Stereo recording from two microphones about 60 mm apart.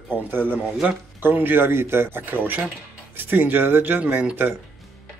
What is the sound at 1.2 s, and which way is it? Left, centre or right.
Speech, right.